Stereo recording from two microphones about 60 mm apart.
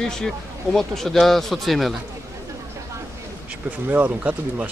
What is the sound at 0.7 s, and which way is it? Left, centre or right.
Speech, centre.